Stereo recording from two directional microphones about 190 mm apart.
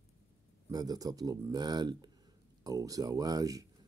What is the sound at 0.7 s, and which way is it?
Speech, 20° right (ahead or behind).